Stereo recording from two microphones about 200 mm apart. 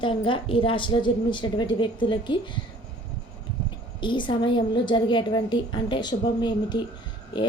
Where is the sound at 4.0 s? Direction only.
25° left (ahead or behind).